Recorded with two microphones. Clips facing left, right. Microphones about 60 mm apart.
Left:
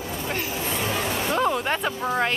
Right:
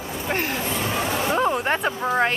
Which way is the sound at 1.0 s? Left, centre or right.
Centre.